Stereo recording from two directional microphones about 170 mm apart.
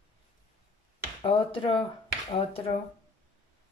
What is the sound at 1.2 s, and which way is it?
Speech, 30° left (ahead or behind).